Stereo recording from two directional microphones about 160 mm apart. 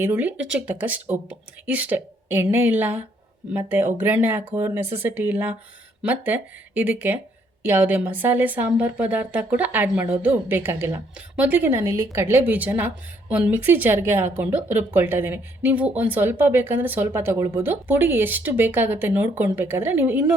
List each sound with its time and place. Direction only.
0.0 s a woman's voice: 10° right (ahead or behind)